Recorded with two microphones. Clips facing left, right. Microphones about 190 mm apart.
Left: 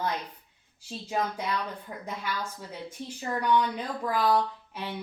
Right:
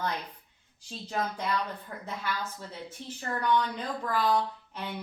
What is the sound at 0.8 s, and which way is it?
Speech, 10° left (ahead or behind).